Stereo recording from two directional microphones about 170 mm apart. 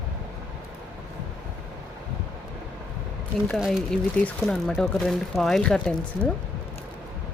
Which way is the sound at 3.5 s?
Centre (ahead or behind).